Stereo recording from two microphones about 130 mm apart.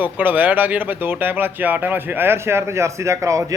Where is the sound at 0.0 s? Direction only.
15° right (ahead or behind).